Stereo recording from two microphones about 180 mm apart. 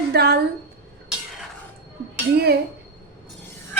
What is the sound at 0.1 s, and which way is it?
Speech, 60° right (ahead or behind).